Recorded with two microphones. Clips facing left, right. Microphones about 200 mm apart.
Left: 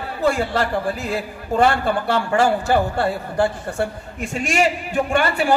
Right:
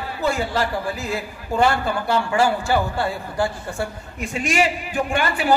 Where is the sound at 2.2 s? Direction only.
50° left (ahead or behind).